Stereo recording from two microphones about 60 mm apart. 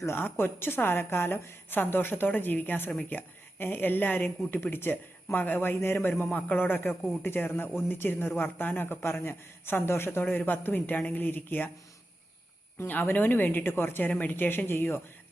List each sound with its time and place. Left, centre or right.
0.2 s speech: left
12.9 s speech: left